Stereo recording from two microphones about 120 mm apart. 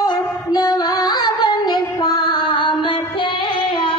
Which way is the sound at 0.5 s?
35° left (ahead or behind).